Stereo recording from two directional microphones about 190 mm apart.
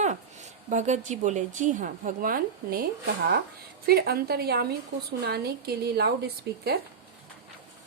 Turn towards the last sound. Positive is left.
turn(degrees=-55)  # may be behind; listen again after turning